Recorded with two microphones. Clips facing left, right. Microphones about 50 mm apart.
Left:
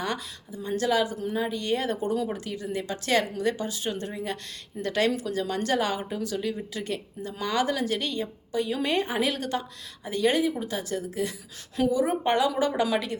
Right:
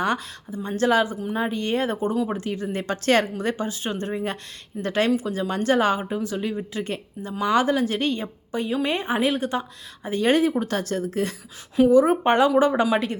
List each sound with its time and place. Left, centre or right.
0.0 s speech: right
3.3 s speech: right
8.7 s speech: right